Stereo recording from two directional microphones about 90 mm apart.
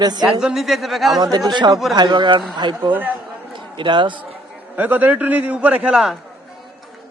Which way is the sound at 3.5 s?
60° right (ahead or behind).